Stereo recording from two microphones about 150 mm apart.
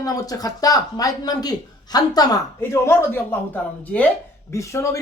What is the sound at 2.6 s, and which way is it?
Speech, 15° left (ahead or behind).